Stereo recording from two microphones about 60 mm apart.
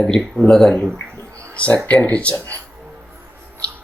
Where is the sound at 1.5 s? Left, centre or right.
Left.